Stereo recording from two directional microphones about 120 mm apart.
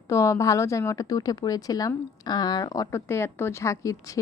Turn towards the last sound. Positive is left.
turn(degrees=30)  # may be behind; listen again after turning